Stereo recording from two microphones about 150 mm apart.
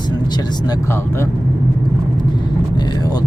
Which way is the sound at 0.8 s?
15° left (ahead or behind).